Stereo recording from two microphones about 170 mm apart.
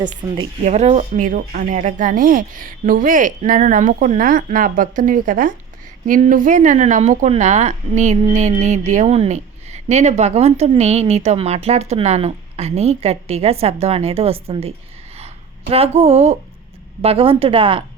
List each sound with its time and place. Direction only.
0.2 s speech: 20° right (ahead or behind)
0.6 s a woman's voice: 45° right (ahead or behind)
15.7 s a woman's voice: 35° right (ahead or behind)